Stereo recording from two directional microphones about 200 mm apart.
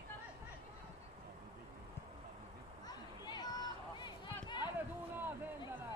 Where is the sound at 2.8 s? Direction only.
20° left (ahead or behind).